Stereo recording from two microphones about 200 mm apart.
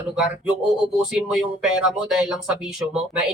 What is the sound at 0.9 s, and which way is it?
Speech, 5° right (ahead or behind).